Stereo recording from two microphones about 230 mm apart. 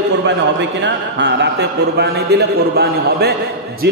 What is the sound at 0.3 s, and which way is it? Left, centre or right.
A man's voice, right.